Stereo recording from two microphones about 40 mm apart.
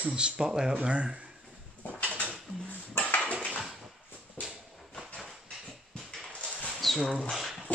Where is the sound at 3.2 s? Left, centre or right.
Left.